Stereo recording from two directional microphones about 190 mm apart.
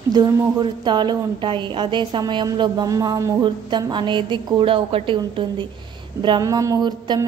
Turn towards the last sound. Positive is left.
turn(degrees=-20)  # may be behind; listen again after turning